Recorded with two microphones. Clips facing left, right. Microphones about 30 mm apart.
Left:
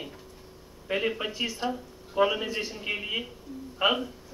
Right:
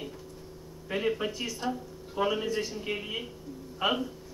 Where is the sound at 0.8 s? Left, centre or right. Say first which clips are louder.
Left 1 dB; left.